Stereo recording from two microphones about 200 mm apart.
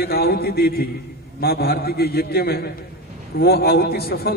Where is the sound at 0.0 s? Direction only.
50° left (ahead or behind).